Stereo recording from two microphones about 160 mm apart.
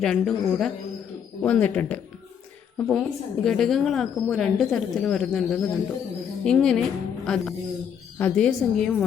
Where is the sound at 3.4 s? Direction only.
Centre (ahead or behind).